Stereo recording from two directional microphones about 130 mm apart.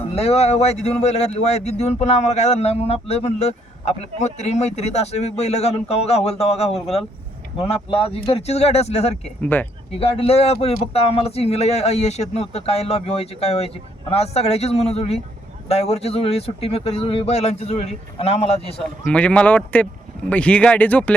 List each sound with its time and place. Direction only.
0.0 s speech: 50° left (ahead or behind)
6.7 s speech: centre (ahead or behind)
7.7 s speech: 50° left (ahead or behind)
9.4 s speech: 15° left (ahead or behind)
9.9 s speech: 45° left (ahead or behind)
19.1 s speech: 10° left (ahead or behind)